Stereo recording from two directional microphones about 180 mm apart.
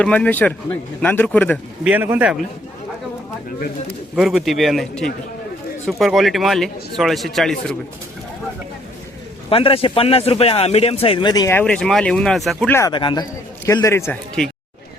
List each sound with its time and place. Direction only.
0.0 s a man's voice: 5° left (ahead or behind)
1.8 s speech: 10° right (ahead or behind)
4.1 s speech: 5° right (ahead or behind)
9.5 s a man's voice: 30° left (ahead or behind); by 12.7 s centre (ahead or behind)
12.7 s a man's voice: 20° left (ahead or behind)